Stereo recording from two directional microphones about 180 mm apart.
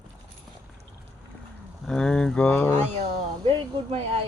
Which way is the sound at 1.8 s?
5° left (ahead or behind).